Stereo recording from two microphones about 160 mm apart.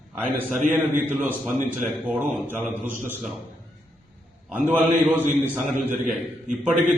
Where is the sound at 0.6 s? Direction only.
50° right (ahead or behind).